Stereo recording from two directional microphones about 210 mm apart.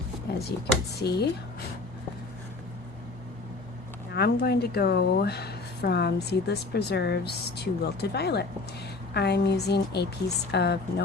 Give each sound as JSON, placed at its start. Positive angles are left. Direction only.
{"t": 0.3, "sound": "a woman's voice", "side_deg": 50}
{"t": 4.1, "sound": "a woman's voice", "side_deg": 50}